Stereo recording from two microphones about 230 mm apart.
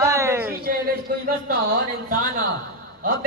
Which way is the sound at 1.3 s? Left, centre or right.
Right.